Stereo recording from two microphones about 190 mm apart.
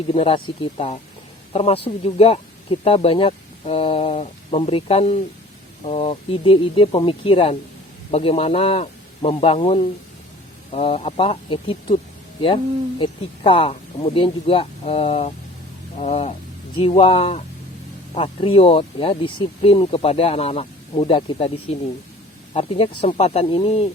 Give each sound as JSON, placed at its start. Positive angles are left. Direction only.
{"t": 0.1, "sound": "speech", "side_deg": 30}
{"t": 13.0, "sound": "speech", "side_deg": 30}
{"t": 22.5, "sound": "speech", "side_deg": 30}